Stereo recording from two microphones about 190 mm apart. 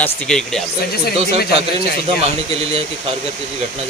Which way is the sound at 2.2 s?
30° right (ahead or behind).